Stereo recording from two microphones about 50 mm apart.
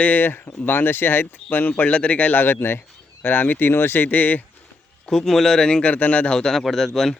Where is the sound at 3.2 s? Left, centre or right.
Left.